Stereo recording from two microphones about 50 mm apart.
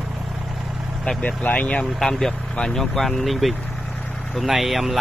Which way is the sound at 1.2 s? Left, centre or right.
Left.